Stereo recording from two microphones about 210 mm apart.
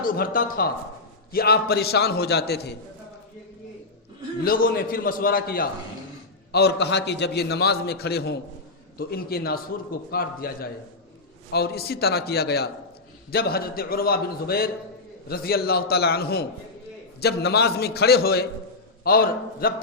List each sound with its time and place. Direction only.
0.0 s a man's voice: 40° left (ahead or behind)
4.4 s a man's voice: 45° left (ahead or behind)